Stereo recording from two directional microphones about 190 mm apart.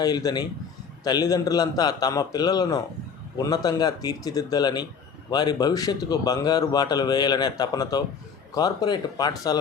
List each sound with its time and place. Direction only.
0.0 s speech: 20° left (ahead or behind)